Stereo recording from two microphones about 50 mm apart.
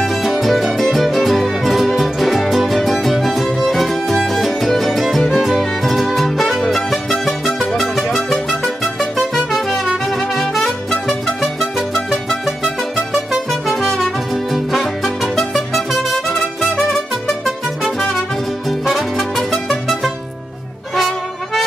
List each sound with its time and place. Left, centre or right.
0.0 s music: centre
10.9 s music: centre
13.5 s music: centre
17.8 s music: centre